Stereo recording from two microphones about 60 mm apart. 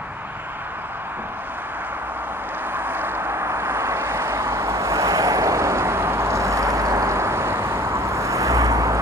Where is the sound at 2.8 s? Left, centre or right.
Right.